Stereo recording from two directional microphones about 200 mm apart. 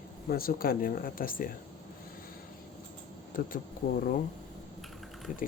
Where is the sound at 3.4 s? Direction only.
45° left (ahead or behind).